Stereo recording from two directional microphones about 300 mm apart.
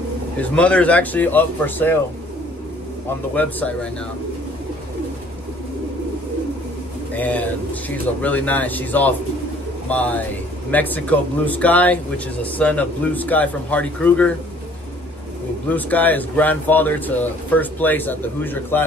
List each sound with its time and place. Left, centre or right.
0.4 s speech: centre
3.3 s speech: centre
7.2 s speech: centre
15.7 s speech: centre